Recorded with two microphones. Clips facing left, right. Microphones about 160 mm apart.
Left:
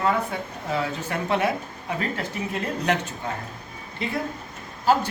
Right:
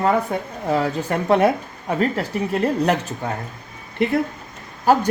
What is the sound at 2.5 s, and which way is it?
Speech, 35° right (ahead or behind).